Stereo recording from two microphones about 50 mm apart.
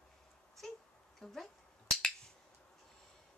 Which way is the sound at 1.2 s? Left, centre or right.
Centre.